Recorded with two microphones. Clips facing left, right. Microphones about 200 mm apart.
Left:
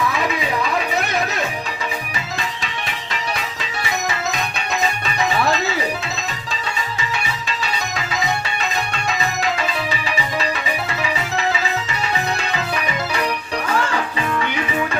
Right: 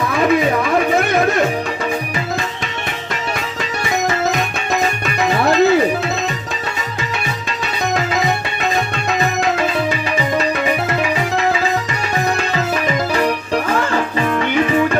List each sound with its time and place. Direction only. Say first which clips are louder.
0.2 s music: right 7 dB; 50° right (ahead or behind)
4.0 s music: right 6 dB; 50° right (ahead or behind)
8.7 s music: right 5 dB; 55° right (ahead or behind)
12.8 s music: right 6 dB; 50° right (ahead or behind)